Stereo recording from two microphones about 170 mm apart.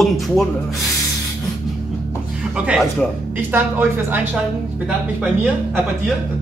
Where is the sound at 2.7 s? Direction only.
Centre (ahead or behind).